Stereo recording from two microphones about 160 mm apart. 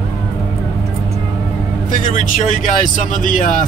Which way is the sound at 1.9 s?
50° left (ahead or behind).